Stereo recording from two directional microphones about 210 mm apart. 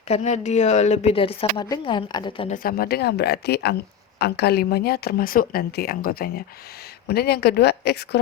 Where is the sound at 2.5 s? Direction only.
45° left (ahead or behind).